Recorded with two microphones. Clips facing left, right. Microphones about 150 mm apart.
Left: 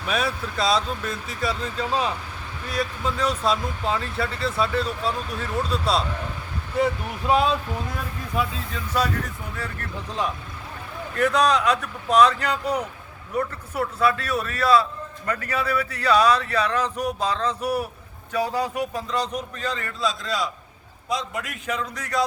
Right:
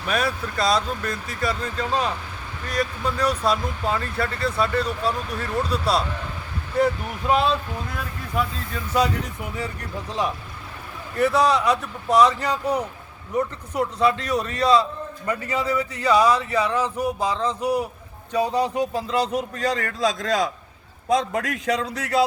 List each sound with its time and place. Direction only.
0.0 s speech: centre (ahead or behind)
11.1 s a man's voice: 10° right (ahead or behind); by 20.5 s 45° right (ahead or behind)
21.7 s a man's voice: 35° right (ahead or behind)